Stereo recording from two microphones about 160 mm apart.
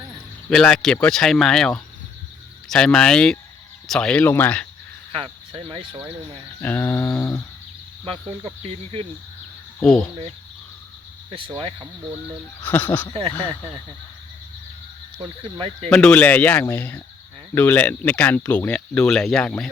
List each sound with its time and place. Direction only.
0.5 s speech: 5° left (ahead or behind)
5.1 s speech: 35° right (ahead or behind)
6.6 s speech: 10° left (ahead or behind)
8.0 s cricket: 35° right (ahead or behind)
9.8 s speech: 5° left (ahead or behind)
11.3 s cricket: 35° right (ahead or behind)
12.6 s speech: 10° left (ahead or behind)
15.2 s cricket: 35° right (ahead or behind)
15.9 s speech: 5° left (ahead or behind)